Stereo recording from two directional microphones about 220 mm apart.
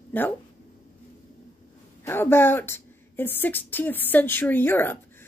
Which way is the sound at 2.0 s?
10° left (ahead or behind).